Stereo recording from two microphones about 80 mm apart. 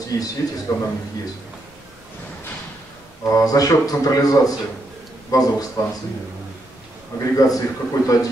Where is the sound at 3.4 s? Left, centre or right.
Left.